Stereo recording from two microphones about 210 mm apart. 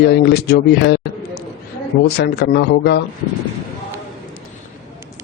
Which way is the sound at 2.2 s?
50° left (ahead or behind).